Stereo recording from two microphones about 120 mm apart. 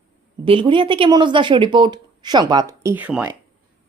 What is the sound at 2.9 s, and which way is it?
Speech, 15° right (ahead or behind).